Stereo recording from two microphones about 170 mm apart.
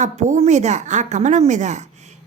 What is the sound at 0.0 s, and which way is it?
A woman's voice, 45° right (ahead or behind).